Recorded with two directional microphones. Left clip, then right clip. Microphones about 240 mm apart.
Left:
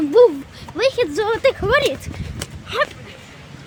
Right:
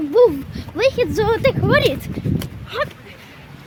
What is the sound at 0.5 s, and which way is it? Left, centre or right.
Speech, centre.